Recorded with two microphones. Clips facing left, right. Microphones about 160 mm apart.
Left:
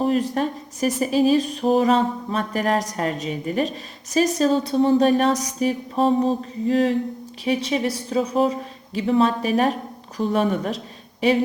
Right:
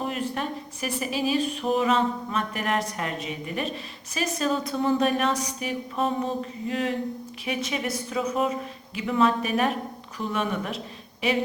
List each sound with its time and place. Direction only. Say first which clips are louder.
0.0 s speech: left 8 dB; 35° left (ahead or behind)